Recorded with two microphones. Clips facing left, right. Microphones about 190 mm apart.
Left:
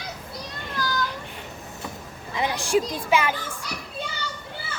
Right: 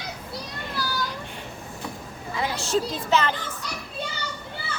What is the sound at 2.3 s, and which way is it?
A woman's voice, 15° left (ahead or behind).